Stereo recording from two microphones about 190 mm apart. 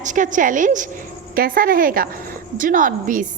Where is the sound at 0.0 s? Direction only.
40° right (ahead or behind).